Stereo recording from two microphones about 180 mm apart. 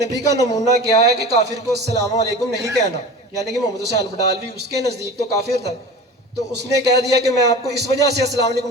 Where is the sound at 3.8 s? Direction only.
65° right (ahead or behind).